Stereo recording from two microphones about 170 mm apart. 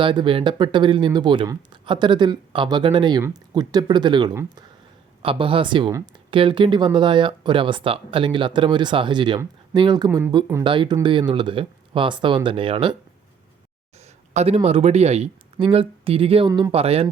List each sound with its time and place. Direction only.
0.0 s speech: 30° right (ahead or behind)
10.1 s speech: 15° right (ahead or behind)
10.3 s speech: 25° right (ahead or behind)
14.3 s speech: 40° right (ahead or behind)
16.5 s speech: 20° right (ahead or behind)
16.7 s speech: 35° right (ahead or behind)